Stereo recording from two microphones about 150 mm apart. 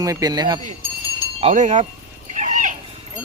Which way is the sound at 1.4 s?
55° right (ahead or behind).